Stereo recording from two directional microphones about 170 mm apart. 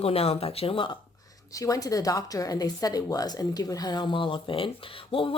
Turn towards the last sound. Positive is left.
turn(degrees=30)  # may be behind; listen again after turning